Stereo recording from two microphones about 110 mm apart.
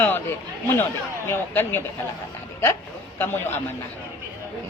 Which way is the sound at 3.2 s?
20° left (ahead or behind).